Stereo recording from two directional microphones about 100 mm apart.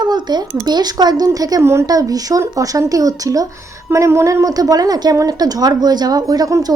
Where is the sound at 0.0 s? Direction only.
45° right (ahead or behind).